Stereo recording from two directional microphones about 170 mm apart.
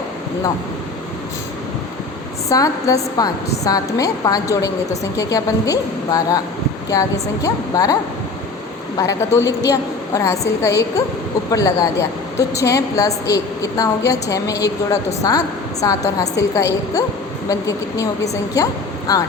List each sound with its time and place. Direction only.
2.5 s a woman's voice: 20° left (ahead or behind)
9.0 s speech: 20° left (ahead or behind)
11.5 s a woman's voice: 20° left (ahead or behind)